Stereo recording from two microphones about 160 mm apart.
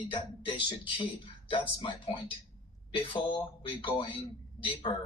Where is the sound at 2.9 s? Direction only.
30° left (ahead or behind).